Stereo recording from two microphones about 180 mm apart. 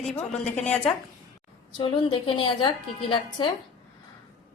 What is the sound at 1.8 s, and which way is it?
A woman's voice, 25° left (ahead or behind).